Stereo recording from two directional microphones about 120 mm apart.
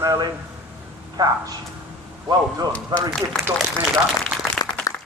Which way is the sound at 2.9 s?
35° right (ahead or behind).